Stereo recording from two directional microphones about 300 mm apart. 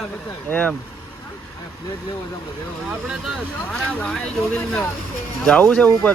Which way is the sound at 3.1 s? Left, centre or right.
Centre.